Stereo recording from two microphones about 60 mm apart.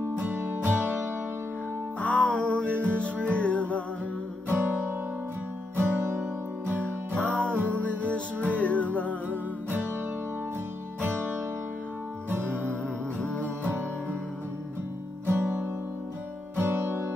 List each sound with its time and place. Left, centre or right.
0.2 s music: right
2.0 s music: left
4.5 s guitar: right
5.8 s music: right
6.7 s music: right
7.7 s music: left
9.3 s music: right
11.0 s music: right
12.3 s music: right
13.2 s music: left
15.2 s music: right